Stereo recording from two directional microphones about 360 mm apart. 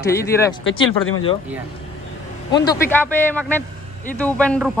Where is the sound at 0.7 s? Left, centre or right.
Left.